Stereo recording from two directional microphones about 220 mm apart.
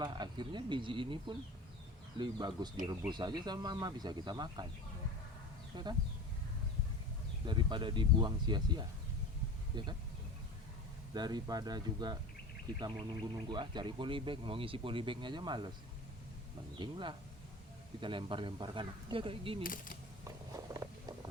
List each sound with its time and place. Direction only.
0.0 s speech: 20° right (ahead or behind)
5.7 s speech: 20° right (ahead or behind)
7.4 s speech: 20° right (ahead or behind)
11.1 s speech: 20° right (ahead or behind)
16.7 s speech: 20° right (ahead or behind)
19.6 s speech: 40° left (ahead or behind)
20.2 s a sound: 15° right (ahead or behind)